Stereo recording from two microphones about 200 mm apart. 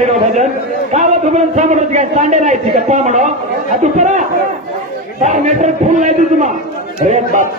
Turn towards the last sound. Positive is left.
turn(degrees=-40)  # may be behind; listen again after turning